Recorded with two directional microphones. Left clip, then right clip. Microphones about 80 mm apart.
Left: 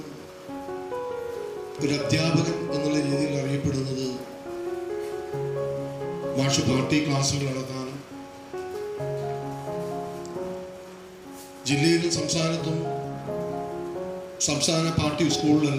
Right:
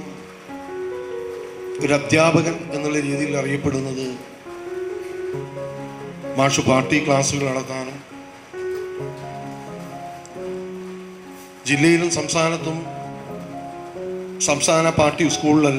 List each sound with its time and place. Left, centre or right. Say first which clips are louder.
1.8 s a man's voice: right 9 dB; right
6.3 s a man's voice: right 9 dB; right
11.6 s a man's voice: right 6 dB; right
14.3 s a man's voice: right 8 dB; right